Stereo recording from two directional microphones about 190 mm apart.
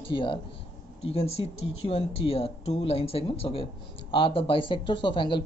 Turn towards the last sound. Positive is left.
turn(degrees=25)  # may be behind; listen again after turning